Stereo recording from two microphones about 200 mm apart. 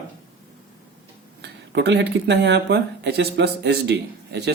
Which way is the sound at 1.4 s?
60° right (ahead or behind).